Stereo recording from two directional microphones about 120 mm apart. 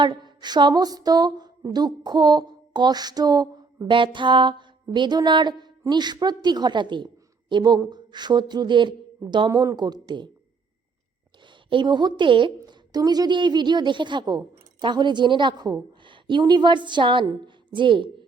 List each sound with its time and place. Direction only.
0.0 s a woman's voice: 40° right (ahead or behind)
11.4 s a woman's voice: 40° right (ahead or behind)